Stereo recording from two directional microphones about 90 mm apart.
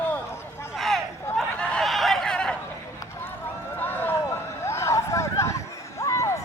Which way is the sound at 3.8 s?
20° left (ahead or behind).